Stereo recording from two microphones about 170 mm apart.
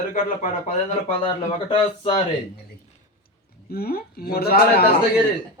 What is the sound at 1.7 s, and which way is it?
Speech, 30° left (ahead or behind).